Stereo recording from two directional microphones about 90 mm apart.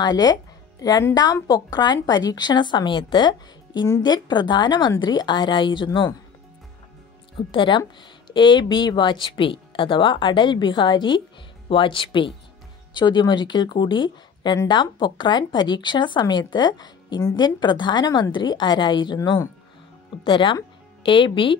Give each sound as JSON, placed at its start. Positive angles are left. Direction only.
{"t": 0.0, "sound": "a woman's voice", "side_deg": 50}
{"t": 7.3, "sound": "speech", "side_deg": 65}
{"t": 12.9, "sound": "speech", "side_deg": 60}
{"t": 20.2, "sound": "speech", "side_deg": 60}